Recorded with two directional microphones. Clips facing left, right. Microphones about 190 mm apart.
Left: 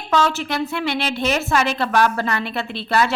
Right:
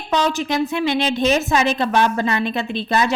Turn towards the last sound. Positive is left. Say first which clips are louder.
# right 1 dB
turn(degrees=-20)  # may be behind; listen again after turning